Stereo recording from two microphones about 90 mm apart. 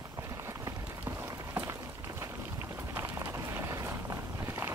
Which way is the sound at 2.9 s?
25° right (ahead or behind).